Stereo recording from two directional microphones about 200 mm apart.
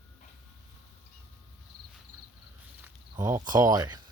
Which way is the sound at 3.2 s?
20° right (ahead or behind).